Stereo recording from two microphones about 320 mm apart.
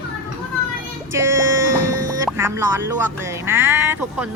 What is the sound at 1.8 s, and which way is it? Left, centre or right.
Music, right.